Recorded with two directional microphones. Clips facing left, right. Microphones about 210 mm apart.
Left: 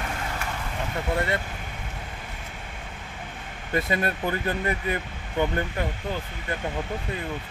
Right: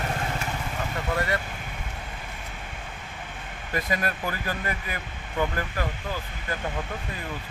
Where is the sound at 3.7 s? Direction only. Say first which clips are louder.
Left 3 dB; 25° left (ahead or behind).